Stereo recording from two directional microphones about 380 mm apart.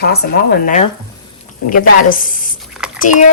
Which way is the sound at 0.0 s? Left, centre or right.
Left.